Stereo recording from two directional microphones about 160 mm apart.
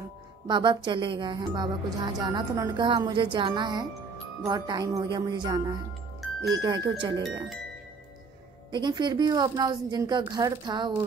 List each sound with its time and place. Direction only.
0.5 s speech: 30° right (ahead or behind)
6.2 s music: centre (ahead or behind)
7.0 s speech: 30° right (ahead or behind)
8.7 s speech: 25° right (ahead or behind)